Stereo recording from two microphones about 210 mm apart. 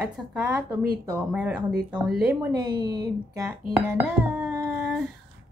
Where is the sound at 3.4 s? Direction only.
5° right (ahead or behind).